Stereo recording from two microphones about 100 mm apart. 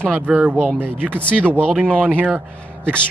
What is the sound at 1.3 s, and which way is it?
Speech, 10° left (ahead or behind).